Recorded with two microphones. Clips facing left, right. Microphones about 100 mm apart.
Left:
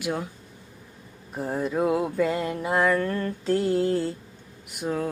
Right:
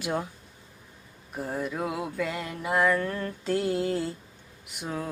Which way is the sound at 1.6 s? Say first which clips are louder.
Left 7 dB; 30° left (ahead or behind).